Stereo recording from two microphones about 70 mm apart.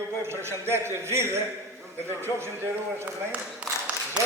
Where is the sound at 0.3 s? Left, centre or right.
Right.